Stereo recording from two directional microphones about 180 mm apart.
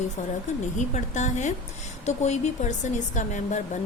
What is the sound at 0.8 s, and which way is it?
Speech, 40° left (ahead or behind).